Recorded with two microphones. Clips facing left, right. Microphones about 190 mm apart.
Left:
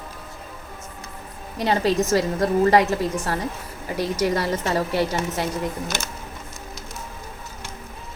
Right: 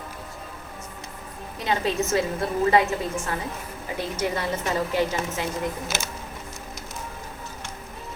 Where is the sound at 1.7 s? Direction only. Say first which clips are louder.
Left 4 dB; 35° left (ahead or behind).